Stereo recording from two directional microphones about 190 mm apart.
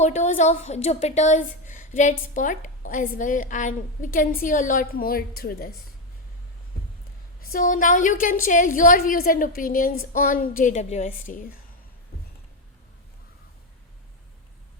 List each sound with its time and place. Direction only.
0.0 s a woman's voice: 40° left (ahead or behind)
7.5 s a woman's voice: 45° left (ahead or behind)
12.1 s a sound: 55° left (ahead or behind)